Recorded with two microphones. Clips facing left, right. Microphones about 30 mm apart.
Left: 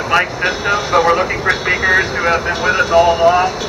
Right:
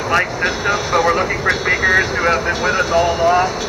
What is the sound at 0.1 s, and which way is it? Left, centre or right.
Speech, centre.